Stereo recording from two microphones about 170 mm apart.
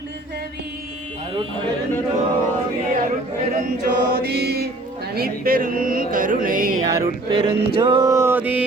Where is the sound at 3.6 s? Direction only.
65° right (ahead or behind).